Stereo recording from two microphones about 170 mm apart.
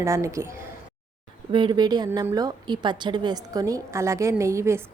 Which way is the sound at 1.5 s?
25° right (ahead or behind).